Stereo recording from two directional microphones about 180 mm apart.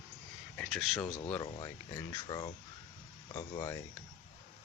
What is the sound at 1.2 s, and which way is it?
Speech, 25° left (ahead or behind).